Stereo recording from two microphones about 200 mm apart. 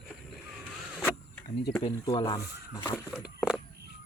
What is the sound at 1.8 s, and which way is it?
Speech, 20° left (ahead or behind).